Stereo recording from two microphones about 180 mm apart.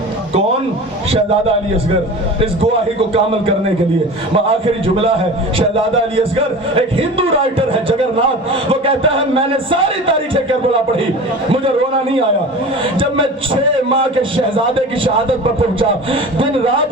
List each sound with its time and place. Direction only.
5.5 s a man's voice: 30° right (ahead or behind)
12.8 s a man's voice: 30° right (ahead or behind)